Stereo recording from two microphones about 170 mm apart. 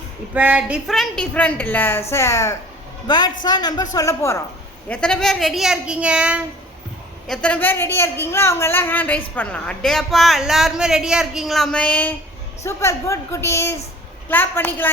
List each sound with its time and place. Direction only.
0.3 s a woman's voice: 10° right (ahead or behind); by 4.4 s 15° left (ahead or behind)
4.9 s speech: 5° left (ahead or behind)
7.3 s a woman's voice: 10° left (ahead or behind)